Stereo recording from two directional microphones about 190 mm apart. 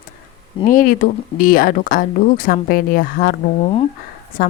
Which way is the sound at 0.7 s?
45° left (ahead or behind).